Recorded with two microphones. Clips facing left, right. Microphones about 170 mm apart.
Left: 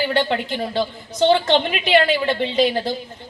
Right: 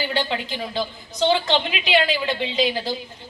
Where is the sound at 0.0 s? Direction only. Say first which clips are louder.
Left 5 dB; 55° left (ahead or behind).